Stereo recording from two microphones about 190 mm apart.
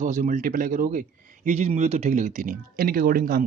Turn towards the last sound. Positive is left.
turn(degrees=-50)  # may be behind; listen again after turning